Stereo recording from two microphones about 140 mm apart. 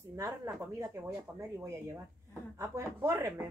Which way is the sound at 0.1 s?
25° right (ahead or behind).